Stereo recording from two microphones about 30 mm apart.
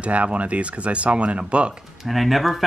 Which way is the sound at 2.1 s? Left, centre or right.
Centre.